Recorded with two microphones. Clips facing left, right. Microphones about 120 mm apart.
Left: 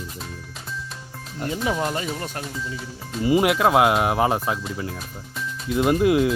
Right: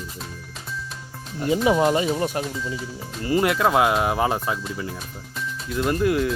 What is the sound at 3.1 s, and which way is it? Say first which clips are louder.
Speech: left 2 dB; 10° left (ahead or behind).